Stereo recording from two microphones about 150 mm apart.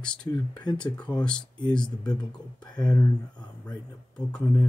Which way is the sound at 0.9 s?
5° left (ahead or behind).